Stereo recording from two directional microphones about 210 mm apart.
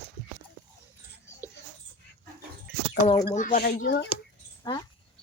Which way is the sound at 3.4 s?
40° left (ahead or behind).